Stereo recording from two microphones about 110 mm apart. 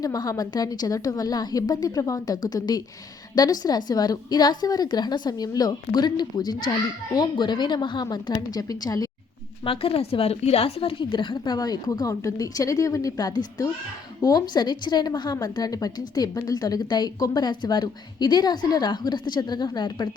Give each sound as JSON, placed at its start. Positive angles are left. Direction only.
{"t": 0.0, "sound": "a woman's voice", "side_deg": 30}
{"t": 9.6, "sound": "a woman's voice", "side_deg": 60}